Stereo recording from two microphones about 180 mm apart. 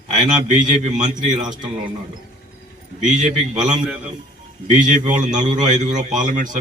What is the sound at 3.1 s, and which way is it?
Speech, 40° right (ahead or behind).